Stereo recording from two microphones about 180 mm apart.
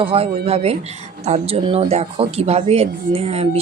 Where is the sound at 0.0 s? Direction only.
30° right (ahead or behind).